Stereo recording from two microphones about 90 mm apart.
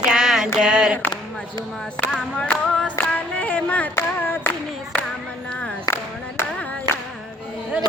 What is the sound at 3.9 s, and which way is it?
Clapping, 25° left (ahead or behind).